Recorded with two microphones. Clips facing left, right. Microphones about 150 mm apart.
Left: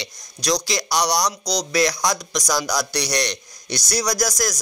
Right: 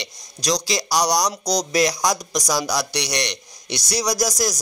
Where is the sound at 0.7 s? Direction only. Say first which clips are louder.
Right 1 dB; 35° right (ahead or behind).